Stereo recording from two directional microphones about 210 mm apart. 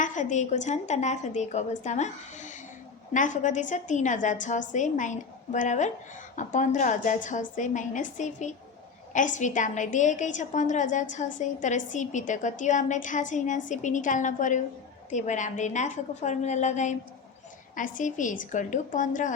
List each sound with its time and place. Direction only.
0.0 s a woman's voice: 35° left (ahead or behind)